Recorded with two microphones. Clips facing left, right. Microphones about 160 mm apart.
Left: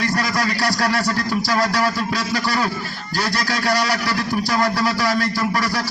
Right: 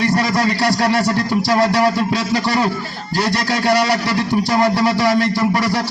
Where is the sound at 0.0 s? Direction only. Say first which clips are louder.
Right 5 dB; 25° right (ahead or behind).